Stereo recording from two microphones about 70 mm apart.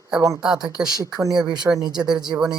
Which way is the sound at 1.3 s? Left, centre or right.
Right.